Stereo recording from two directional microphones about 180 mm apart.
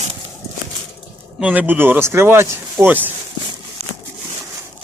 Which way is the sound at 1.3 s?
10° right (ahead or behind).